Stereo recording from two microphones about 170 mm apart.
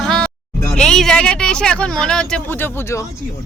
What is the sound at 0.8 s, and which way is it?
Speech, 5° left (ahead or behind).